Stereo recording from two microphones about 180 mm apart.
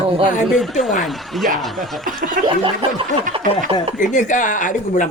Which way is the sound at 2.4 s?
50° right (ahead or behind).